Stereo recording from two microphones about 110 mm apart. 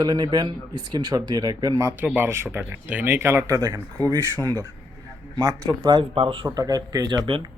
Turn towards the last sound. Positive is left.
turn(degrees=-55)  # may be behind; listen again after turning